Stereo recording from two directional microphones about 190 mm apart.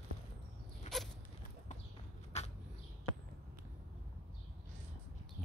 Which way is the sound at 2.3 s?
35° left (ahead or behind).